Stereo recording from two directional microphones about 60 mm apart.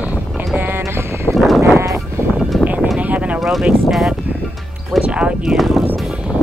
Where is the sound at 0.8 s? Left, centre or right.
Right.